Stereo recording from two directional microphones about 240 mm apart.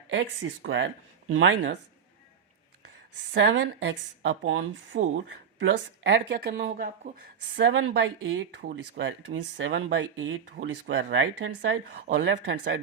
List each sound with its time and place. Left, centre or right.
0.1 s speech: right
3.3 s speech: right
7.5 s speech: right